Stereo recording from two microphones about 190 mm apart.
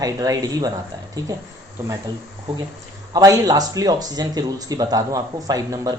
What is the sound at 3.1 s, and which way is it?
Speech, 20° right (ahead or behind).